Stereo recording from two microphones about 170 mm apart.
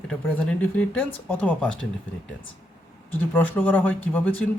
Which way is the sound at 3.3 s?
10° left (ahead or behind).